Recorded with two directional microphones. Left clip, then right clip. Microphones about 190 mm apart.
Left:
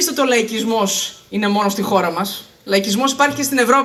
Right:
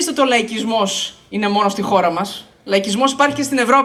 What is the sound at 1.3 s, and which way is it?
Speech, 30° left (ahead or behind).